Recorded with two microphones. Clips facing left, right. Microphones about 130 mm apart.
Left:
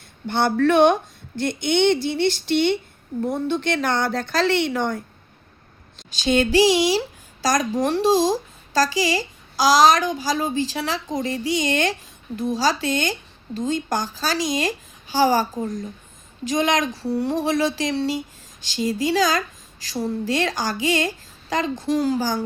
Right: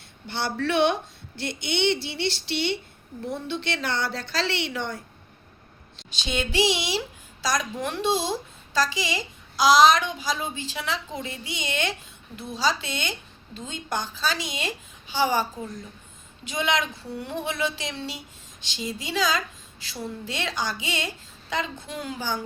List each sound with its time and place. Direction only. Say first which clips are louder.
0.3 s speech: left 9 dB; 50° left (ahead or behind)
6.0 s a woman's voice: left 10 dB; 45° left (ahead or behind)